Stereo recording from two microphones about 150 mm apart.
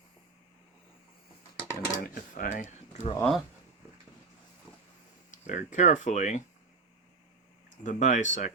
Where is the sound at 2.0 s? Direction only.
70° left (ahead or behind).